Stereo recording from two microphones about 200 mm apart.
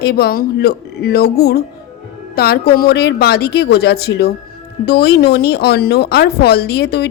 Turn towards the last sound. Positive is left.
turn(degrees=55)  # may be behind; listen again after turning